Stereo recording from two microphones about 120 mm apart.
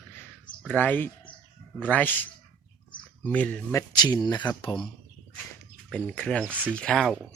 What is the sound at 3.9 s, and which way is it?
Speech, 35° left (ahead or behind).